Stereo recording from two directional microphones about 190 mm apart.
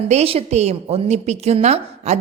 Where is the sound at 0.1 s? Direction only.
35° right (ahead or behind).